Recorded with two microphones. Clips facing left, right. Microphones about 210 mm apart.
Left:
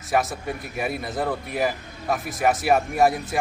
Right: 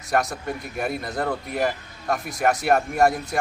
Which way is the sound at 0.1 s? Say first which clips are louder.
Even; centre (ahead or behind).